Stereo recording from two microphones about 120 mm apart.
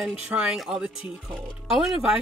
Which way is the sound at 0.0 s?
5° right (ahead or behind).